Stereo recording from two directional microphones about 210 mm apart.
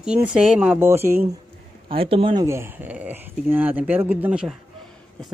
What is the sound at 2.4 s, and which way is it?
Speech, 10° right (ahead or behind).